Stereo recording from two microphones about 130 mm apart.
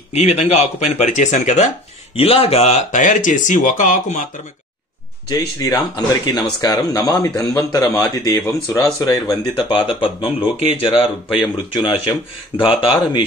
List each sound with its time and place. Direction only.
0.1 s speech: 55° left (ahead or behind)
2.1 s speech: 50° left (ahead or behind); by 4.3 s 75° left (ahead or behind)
5.3 s speech: 30° left (ahead or behind)
9.8 s speech: 40° left (ahead or behind)